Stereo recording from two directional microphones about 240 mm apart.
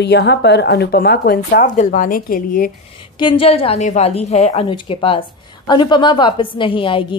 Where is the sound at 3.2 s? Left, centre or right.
Left.